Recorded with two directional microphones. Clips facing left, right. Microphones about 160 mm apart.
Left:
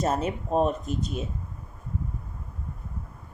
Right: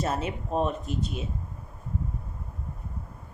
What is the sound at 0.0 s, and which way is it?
A woman's voice, 40° left (ahead or behind).